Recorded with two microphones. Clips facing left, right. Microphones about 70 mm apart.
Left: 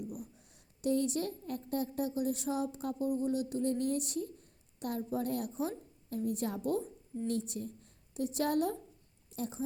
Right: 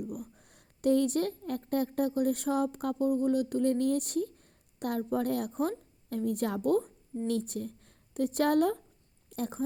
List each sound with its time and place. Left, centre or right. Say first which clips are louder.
0.0 s a woman's voice: right 4 dB; right